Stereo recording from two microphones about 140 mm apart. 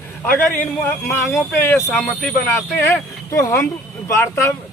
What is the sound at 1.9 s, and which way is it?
Speech, 5° left (ahead or behind).